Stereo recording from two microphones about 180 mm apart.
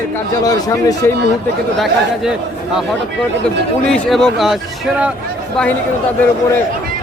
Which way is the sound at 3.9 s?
Centre (ahead or behind).